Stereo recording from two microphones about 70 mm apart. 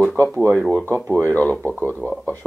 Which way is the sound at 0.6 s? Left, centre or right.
Centre.